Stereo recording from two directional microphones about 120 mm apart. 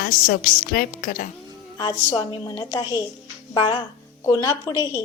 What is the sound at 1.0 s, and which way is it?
Speech, 90° left.